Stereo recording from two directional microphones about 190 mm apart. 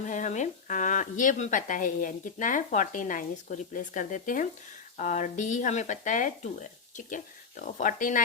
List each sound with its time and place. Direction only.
0.0 s speech: 40° left (ahead or behind)